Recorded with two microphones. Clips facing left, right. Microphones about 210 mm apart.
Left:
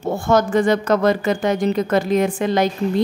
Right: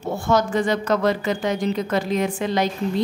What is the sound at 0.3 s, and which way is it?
A woman's voice, 50° left (ahead or behind).